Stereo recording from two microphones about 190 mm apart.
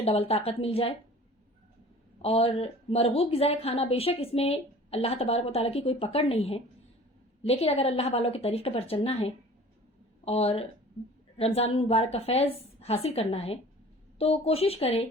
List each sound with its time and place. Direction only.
0.0 s a woman's voice: 30° left (ahead or behind)
2.2 s a woman's voice: 30° left (ahead or behind)